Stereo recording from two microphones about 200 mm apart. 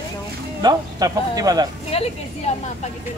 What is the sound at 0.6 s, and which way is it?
Speech, 20° right (ahead or behind).